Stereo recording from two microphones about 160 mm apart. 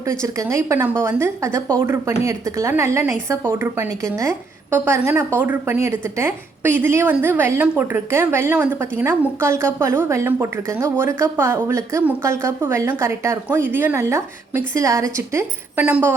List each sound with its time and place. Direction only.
0.1 s a woman's voice: 20° right (ahead or behind)